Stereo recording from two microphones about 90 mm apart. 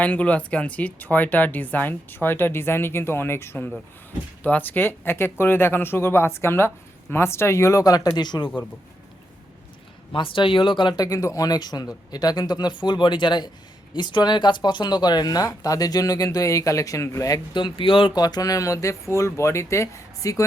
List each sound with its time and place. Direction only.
0.0 s speech: 15° left (ahead or behind); by 8.4 s 55° left (ahead or behind)
10.1 s speech: 70° left (ahead or behind)
10.9 s speech: 40° left (ahead or behind)
17.5 s speech: 70° left (ahead or behind)
18.1 s speech: 50° left (ahead or behind)